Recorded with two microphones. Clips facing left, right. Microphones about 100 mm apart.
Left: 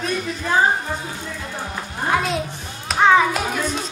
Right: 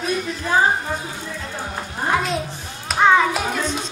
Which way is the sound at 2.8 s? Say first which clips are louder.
Even; centre (ahead or behind).